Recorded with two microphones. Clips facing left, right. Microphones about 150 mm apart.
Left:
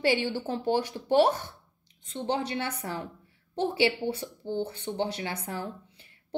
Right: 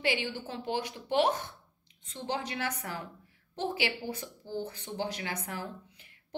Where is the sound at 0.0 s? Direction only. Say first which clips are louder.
Left 6 dB; 40° left (ahead or behind).